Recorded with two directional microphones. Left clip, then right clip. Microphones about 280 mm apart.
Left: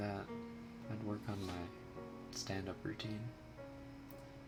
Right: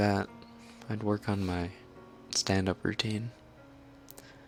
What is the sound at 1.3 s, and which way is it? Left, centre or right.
Speech, right.